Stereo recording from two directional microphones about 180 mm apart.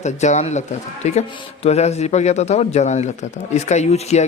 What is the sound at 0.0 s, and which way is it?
A man's voice, 40° left (ahead or behind).